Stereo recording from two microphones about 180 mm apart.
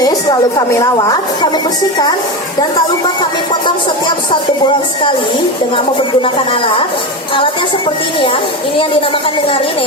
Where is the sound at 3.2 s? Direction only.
25° left (ahead or behind).